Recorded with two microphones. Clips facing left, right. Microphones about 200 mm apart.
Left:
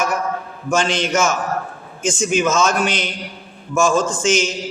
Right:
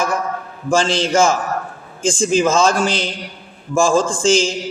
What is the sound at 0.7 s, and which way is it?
A man's voice, 30° right (ahead or behind).